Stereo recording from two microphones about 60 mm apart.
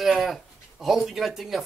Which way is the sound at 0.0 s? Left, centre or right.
Centre.